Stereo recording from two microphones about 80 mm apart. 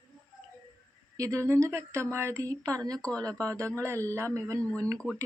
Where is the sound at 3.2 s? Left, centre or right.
Right.